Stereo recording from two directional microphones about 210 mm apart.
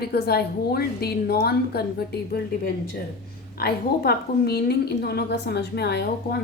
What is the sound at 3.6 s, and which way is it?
A woman's voice, 45° left (ahead or behind).